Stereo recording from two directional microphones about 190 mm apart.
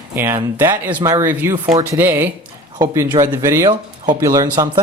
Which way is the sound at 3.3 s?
15° right (ahead or behind).